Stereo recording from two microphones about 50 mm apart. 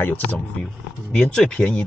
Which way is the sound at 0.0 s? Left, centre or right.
Left.